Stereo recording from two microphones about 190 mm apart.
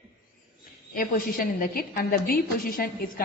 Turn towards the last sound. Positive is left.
turn(degrees=50)  # may be behind; listen again after turning